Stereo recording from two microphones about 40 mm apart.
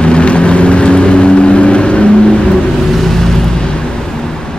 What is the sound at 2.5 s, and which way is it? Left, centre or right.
Vehicle, centre.